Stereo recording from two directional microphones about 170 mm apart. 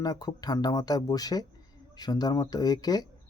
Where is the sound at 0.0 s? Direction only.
20° left (ahead or behind).